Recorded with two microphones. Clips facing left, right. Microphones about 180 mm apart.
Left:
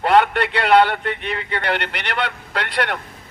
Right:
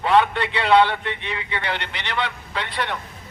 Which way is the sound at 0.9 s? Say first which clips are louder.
Left 4 dB; 50° left (ahead or behind).